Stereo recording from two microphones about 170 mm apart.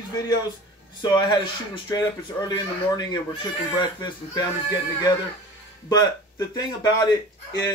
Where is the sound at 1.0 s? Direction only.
25° left (ahead or behind).